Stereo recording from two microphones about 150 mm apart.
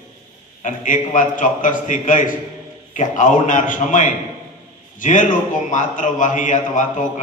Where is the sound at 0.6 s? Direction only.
60° left (ahead or behind).